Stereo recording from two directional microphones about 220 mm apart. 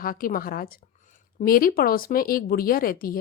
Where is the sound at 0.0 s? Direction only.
40° left (ahead or behind).